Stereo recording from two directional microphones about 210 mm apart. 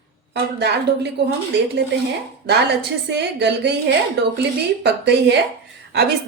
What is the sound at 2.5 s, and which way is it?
A woman's voice, 55° right (ahead or behind).